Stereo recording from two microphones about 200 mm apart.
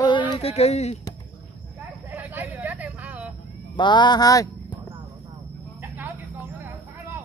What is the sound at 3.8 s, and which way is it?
Speech, 20° left (ahead or behind).